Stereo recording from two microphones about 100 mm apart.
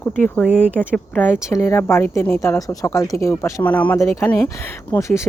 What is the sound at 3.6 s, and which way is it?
Speech, 15° left (ahead or behind).